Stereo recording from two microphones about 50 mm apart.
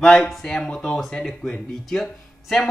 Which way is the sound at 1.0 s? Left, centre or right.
Centre.